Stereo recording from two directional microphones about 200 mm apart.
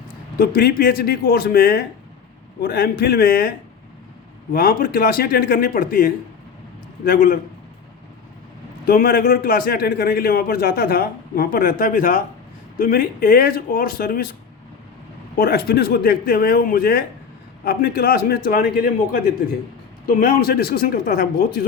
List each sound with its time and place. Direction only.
0.3 s a man's voice: 50° left (ahead or behind)
4.5 s a man's voice: 45° left (ahead or behind)
8.9 s a man's voice: 45° left (ahead or behind)
15.4 s a man's voice: 50° left (ahead or behind)